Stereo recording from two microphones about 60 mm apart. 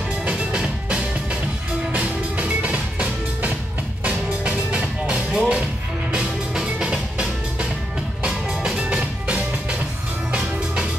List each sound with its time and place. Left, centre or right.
0.2 s music: centre